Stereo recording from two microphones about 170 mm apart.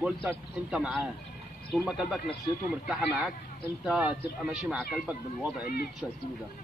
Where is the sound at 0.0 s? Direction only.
10° right (ahead or behind).